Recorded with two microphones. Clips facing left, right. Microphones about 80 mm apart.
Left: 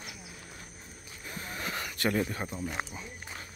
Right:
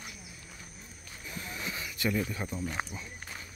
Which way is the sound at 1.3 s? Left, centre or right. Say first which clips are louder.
Left 2 dB; left.